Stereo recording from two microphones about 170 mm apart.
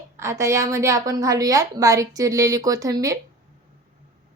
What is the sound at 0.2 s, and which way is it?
A woman's voice, 15° right (ahead or behind).